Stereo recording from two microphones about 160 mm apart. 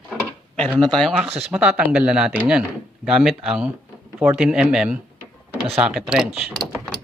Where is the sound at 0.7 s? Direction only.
5° left (ahead or behind).